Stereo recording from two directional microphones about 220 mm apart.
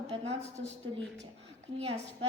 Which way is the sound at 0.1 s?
30° right (ahead or behind).